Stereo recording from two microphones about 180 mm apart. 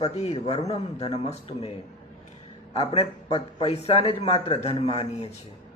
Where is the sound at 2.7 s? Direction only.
35° left (ahead or behind).